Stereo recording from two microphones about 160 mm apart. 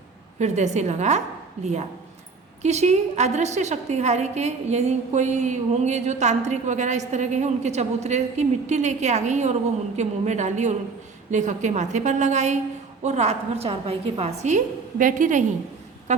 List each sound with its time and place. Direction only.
0.3 s a woman's voice: 45° right (ahead or behind)